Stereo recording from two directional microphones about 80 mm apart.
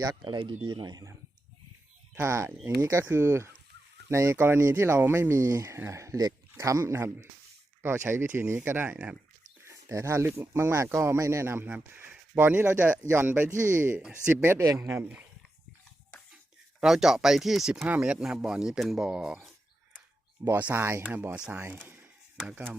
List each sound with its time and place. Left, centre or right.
0.3 s speech: right
2.2 s speech: right
4.4 s speech: right
9.6 s speech: right
13.5 s speech: right
16.8 s speech: centre
17.8 s speech: centre
20.6 s speech: right
21.3 s speech: centre